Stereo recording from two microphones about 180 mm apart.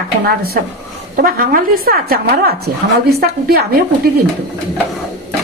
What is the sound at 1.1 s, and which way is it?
A woman's voice, 55° right (ahead or behind).